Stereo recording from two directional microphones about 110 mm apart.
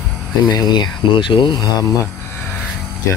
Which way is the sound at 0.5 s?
40° left (ahead or behind).